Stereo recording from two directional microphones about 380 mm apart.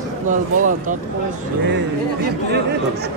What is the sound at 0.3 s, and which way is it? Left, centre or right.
Speech, centre.